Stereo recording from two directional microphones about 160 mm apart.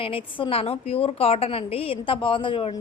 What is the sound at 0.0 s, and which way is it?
A woman's voice, 35° left (ahead or behind).